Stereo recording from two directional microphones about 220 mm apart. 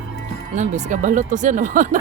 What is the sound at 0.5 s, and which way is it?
Speech, 35° right (ahead or behind).